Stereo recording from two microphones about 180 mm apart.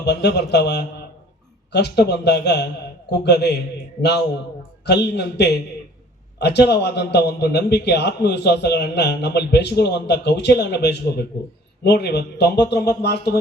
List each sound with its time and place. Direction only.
0.0 s a man's voice: 70° left (ahead or behind)
4.9 s a man's voice: 65° left (ahead or behind)